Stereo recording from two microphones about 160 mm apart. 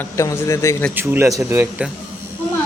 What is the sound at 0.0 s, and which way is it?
Speech, 15° left (ahead or behind).